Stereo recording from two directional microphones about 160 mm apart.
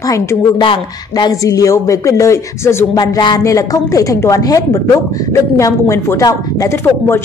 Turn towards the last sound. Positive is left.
turn(degrees=15)  # may be behind; listen again after turning